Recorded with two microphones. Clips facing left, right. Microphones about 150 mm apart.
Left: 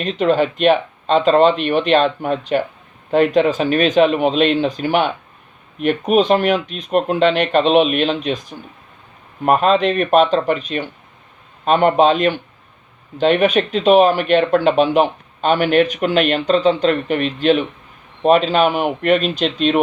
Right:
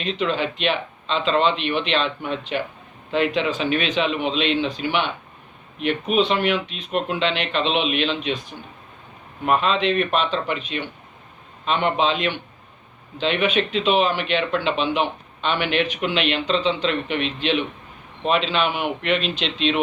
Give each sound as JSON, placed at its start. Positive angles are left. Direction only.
{"t": 0.0, "sound": "speech", "side_deg": 45}